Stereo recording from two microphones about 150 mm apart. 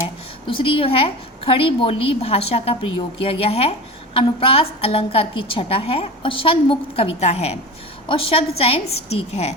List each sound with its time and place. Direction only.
0.4 s a woman's voice: 35° left (ahead or behind)